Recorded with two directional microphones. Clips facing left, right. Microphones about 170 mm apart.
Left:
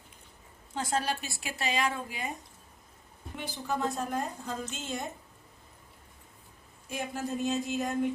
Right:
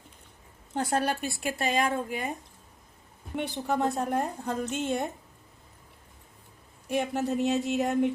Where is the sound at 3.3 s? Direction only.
60° right (ahead or behind).